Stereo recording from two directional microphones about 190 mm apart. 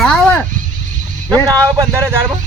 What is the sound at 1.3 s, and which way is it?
Speech, 15° right (ahead or behind).